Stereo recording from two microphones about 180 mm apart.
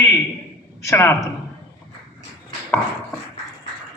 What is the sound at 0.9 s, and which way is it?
Speech, 15° left (ahead or behind).